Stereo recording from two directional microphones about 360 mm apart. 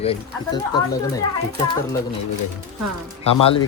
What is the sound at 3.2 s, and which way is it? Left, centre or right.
Speech, centre.